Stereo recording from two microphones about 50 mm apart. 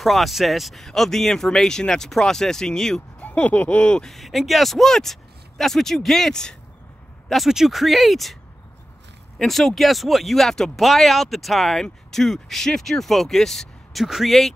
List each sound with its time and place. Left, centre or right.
0.0 s speech: centre
3.2 s a sound: left
4.1 s speech: centre
9.4 s speech: centre
14.0 s speech: centre